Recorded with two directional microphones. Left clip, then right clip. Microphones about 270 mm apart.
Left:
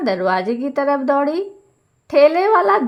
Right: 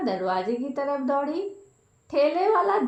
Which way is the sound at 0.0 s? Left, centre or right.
Left.